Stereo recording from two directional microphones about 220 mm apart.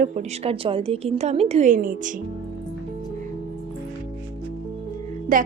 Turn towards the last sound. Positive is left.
turn(degrees=-35)  # may be behind; listen again after turning